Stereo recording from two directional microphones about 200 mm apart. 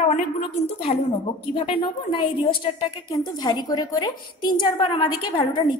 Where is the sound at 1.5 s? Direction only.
25° left (ahead or behind).